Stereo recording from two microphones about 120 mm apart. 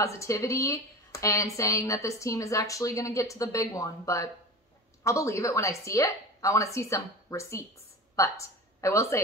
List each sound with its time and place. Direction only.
0.0 s speech: 25° left (ahead or behind)